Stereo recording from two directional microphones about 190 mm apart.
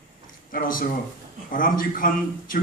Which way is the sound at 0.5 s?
45° left (ahead or behind).